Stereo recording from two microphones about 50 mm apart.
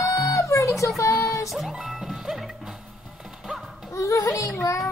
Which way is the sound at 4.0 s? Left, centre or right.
Left.